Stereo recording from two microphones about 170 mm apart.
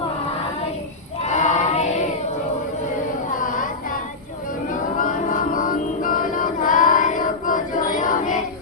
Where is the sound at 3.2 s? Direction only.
50° left (ahead or behind).